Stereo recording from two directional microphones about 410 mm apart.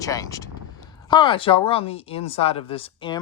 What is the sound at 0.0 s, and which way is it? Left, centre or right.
Speech, centre.